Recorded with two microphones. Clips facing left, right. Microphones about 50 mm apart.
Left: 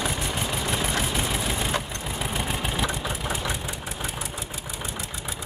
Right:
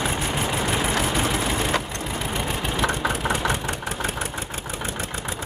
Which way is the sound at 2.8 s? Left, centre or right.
Right.